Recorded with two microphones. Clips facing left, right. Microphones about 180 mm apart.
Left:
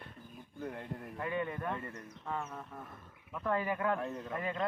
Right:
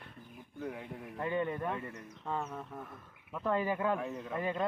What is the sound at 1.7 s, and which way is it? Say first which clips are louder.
Speech: right 1 dB; 5° right (ahead or behind).